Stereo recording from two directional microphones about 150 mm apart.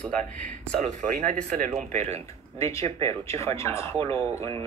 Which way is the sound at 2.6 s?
20° left (ahead or behind).